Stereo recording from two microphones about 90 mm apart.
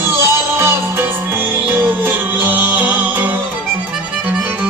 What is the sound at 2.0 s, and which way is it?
Music, 20° right (ahead or behind).